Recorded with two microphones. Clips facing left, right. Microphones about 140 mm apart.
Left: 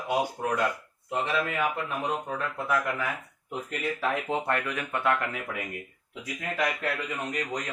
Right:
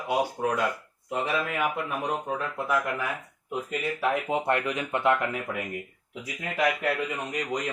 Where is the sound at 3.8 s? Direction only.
5° right (ahead or behind); by 5.1 s 20° right (ahead or behind).